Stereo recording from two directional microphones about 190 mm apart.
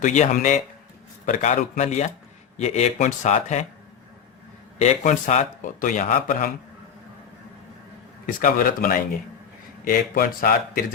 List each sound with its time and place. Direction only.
0.0 s a man's voice: 40° left (ahead or behind)
4.8 s speech: 40° left (ahead or behind)
8.3 s speech: 45° left (ahead or behind)